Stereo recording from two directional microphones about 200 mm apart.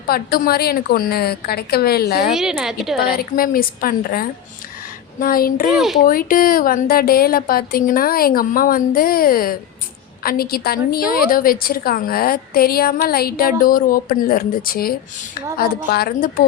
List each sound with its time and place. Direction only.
0.1 s a woman's voice: 50° left (ahead or behind)
2.3 s a woman's voice: centre (ahead or behind)
3.3 s a woman's voice: 45° left (ahead or behind)
5.7 s a woman's voice: centre (ahead or behind)
6.0 s a woman's voice: 45° left (ahead or behind)